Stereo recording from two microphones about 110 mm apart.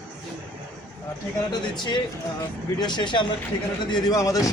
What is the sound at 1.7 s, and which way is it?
Speech, 40° left (ahead or behind).